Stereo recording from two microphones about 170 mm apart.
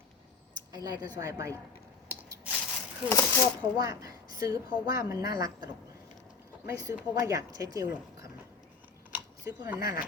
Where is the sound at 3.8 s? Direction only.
20° right (ahead or behind).